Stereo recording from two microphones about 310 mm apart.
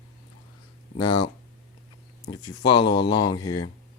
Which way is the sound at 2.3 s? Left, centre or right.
Centre.